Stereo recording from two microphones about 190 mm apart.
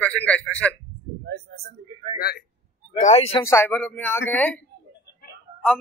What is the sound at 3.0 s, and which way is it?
Speech, 35° left (ahead or behind).